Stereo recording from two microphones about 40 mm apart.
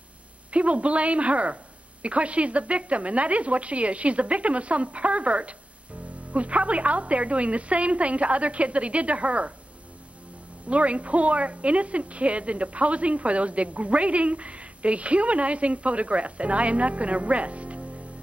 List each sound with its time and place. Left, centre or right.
0.5 s speech: right
10.7 s speech: right